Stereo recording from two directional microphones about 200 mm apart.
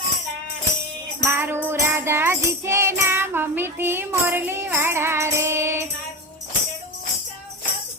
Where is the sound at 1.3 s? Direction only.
10° right (ahead or behind).